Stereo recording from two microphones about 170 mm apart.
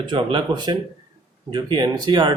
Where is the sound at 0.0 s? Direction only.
30° right (ahead or behind).